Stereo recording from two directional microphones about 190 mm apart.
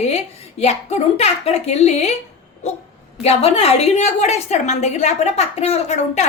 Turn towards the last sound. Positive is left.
turn(degrees=35)  # may be behind; listen again after turning